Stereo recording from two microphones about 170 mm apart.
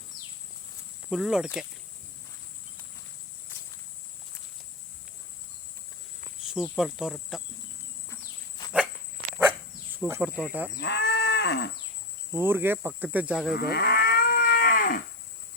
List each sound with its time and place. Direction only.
0.1 s a sound: centre (ahead or behind)
1.1 s speech: 5° right (ahead or behind)
6.4 s speech: centre (ahead or behind)
8.1 s insect: 20° left (ahead or behind)
9.9 s speech: 10° right (ahead or behind)
10.8 s moo: 90° left
12.3 s speech: 15° right (ahead or behind)
13.5 s livestock: 65° left (ahead or behind)